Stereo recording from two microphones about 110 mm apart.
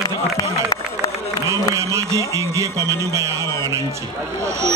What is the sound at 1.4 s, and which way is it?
Speech, 25° right (ahead or behind).